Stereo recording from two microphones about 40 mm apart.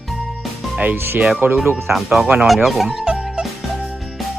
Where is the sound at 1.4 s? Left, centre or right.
Right.